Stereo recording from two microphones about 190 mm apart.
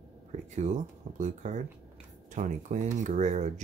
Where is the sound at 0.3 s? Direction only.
40° right (ahead or behind).